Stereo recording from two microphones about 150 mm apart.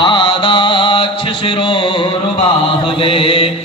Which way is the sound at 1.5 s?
30° left (ahead or behind).